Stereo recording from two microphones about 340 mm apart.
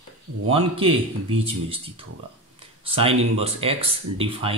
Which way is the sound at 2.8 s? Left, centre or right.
Centre.